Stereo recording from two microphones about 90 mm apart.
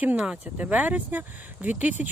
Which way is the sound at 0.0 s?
15° right (ahead or behind).